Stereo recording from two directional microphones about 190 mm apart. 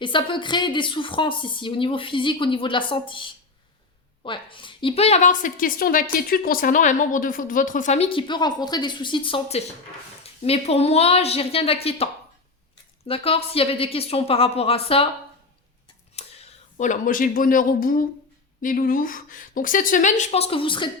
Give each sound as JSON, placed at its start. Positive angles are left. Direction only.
{"t": 0.0, "sound": "a woman's voice", "side_deg": 25}
{"t": 13.1, "sound": "a woman's voice", "side_deg": 30}
{"t": 16.1, "sound": "a woman's voice", "side_deg": 35}